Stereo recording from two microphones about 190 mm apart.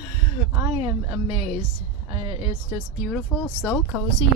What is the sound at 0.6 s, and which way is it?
Speech, 20° right (ahead or behind).